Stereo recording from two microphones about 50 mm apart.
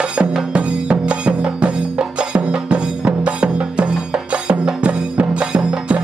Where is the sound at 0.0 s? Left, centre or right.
Right.